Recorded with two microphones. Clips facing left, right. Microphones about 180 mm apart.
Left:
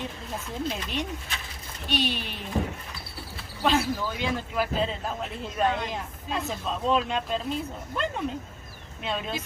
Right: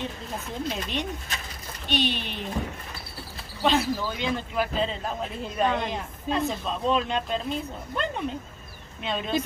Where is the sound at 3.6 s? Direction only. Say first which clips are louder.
Right 1 dB; 5° left (ahead or behind).